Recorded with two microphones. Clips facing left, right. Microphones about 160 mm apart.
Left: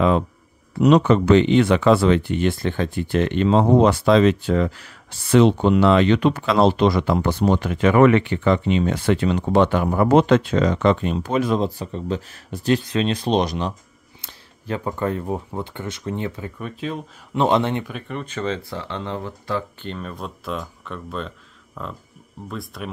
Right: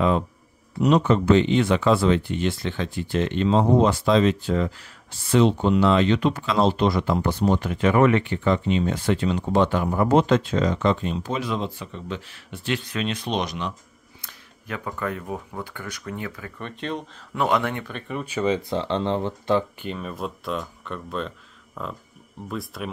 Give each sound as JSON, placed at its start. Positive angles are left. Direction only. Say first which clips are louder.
{"t": 0.7, "sound": "speech", "louder": "left 4 dB", "side_deg": 85}
{"t": 16.5, "sound": "speech", "louder": "left 2 dB", "side_deg": 5}
{"t": 17.3, "sound": "speech", "louder": "left 4 dB", "side_deg": 25}
{"t": 17.8, "sound": "speech", "louder": "left 1 dB", "side_deg": 0}
{"t": 19.8, "sound": "speech", "louder": "right 1 dB", "side_deg": -5}